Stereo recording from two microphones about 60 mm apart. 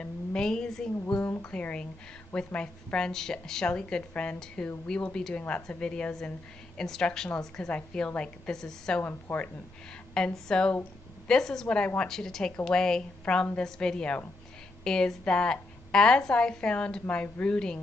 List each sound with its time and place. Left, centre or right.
0.0 s a woman's voice: centre
1.4 s a woman's voice: left
9.0 s speech: left
10.1 s a woman's voice: centre